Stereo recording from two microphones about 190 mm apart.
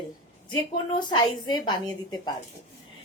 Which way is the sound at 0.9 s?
25° left (ahead or behind).